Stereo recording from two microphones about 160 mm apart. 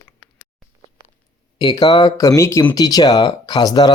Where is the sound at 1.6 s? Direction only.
25° left (ahead or behind).